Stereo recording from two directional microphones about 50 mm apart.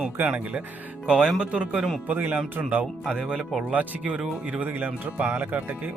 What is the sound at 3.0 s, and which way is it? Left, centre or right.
Speech, centre.